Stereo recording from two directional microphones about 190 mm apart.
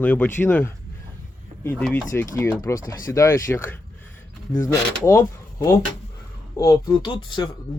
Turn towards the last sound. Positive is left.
turn(degrees=25)  # may be behind; listen again after turning